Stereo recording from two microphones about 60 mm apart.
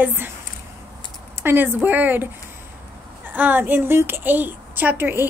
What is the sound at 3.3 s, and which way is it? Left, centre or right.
A woman's voice, right.